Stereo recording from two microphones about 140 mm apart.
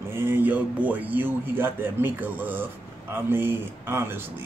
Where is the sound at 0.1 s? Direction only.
15° right (ahead or behind).